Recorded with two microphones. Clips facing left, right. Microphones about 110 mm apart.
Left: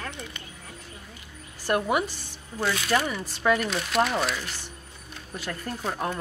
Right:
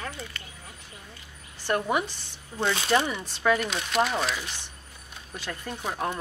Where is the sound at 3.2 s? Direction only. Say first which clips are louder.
Left 1 dB; centre (ahead or behind).